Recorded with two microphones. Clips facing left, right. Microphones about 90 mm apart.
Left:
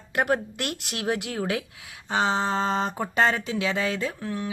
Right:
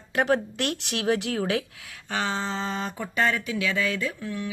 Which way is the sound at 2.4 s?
40° left (ahead or behind).